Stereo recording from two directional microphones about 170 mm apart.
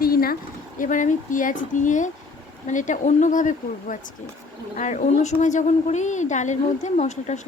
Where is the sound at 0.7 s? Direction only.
50° left (ahead or behind).